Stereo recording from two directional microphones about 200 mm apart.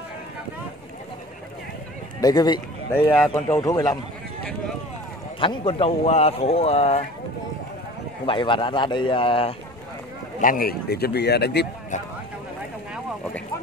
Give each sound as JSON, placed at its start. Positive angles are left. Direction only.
{"t": 2.1, "sound": "speech", "side_deg": 20}
{"t": 2.9, "sound": "a man's voice", "side_deg": 10}
{"t": 5.4, "sound": "speech", "side_deg": 25}
{"t": 8.3, "sound": "speech", "side_deg": 25}
{"t": 10.4, "sound": "speech", "side_deg": 45}